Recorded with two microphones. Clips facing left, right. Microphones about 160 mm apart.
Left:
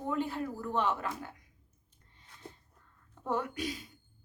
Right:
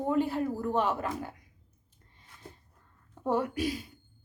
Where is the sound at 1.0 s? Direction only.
35° right (ahead or behind).